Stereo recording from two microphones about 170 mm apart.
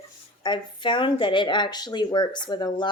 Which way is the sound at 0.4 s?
25° left (ahead or behind).